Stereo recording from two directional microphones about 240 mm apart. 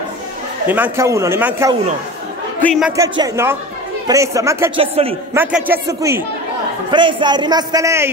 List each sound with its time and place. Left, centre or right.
0.7 s a man's voice: centre
2.6 s a man's voice: centre
3.0 s a man's voice: centre